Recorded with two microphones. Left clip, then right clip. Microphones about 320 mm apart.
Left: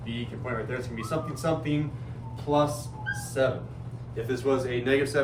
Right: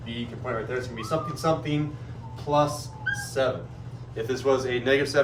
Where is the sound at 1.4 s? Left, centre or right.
Centre.